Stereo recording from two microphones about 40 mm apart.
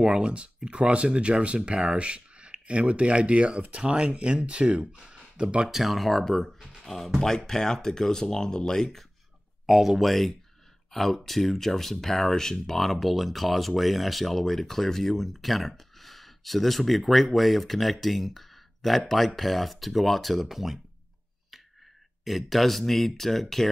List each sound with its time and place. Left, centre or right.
0.0 s speech: right
5.7 s speech: centre
6.8 s a sound: centre
7.2 s speech: centre
9.7 s speech: centre
22.2 s speech: centre